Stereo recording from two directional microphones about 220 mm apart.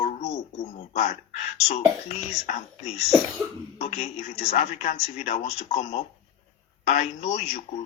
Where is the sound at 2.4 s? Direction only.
30° left (ahead or behind).